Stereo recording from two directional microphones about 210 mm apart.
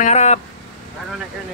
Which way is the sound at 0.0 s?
30° left (ahead or behind).